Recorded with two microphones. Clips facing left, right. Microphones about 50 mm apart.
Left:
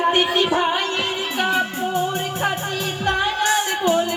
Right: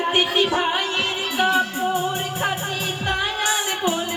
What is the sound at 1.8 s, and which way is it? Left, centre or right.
Music, centre.